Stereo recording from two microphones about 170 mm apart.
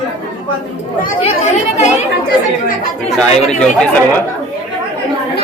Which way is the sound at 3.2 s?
5° left (ahead or behind).